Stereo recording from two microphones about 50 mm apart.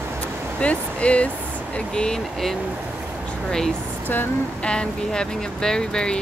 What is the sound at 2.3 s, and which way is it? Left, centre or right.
Speech, centre.